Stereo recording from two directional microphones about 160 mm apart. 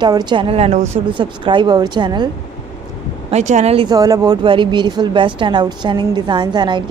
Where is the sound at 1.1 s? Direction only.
30° right (ahead or behind).